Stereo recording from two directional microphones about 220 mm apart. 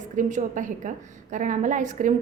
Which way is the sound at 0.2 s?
35° right (ahead or behind).